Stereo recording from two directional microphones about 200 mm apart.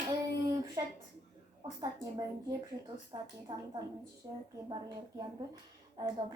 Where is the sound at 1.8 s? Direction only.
20° right (ahead or behind).